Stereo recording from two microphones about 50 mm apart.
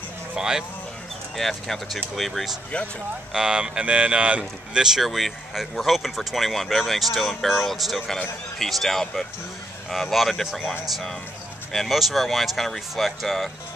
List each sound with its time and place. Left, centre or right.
0.4 s speech: centre
1.3 s speech: centre
3.3 s speech: centre
4.7 s speech: centre